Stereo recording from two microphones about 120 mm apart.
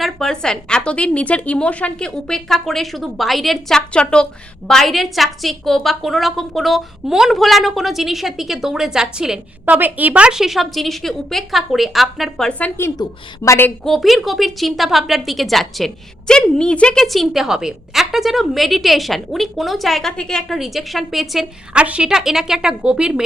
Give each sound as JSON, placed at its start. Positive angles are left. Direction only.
{"t": 0.0, "sound": "a woman's voice", "side_deg": 5}
{"t": 13.8, "sound": "a woman's voice", "side_deg": 0}